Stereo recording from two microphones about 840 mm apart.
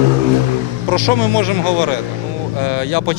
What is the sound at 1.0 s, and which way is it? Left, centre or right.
Speech, left.